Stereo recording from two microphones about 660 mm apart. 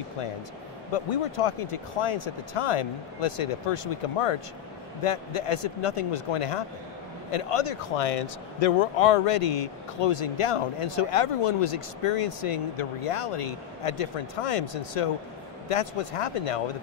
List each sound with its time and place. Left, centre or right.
0.9 s a man's voice: left